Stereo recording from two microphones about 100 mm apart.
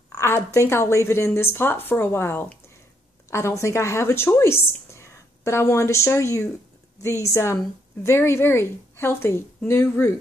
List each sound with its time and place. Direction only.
0.1 s a woman's voice: 30° left (ahead or behind)